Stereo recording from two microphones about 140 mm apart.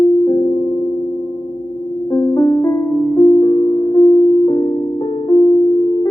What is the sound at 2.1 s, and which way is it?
Music, 25° left (ahead or behind).